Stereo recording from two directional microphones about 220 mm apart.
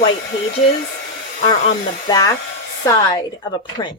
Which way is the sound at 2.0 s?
15° left (ahead or behind).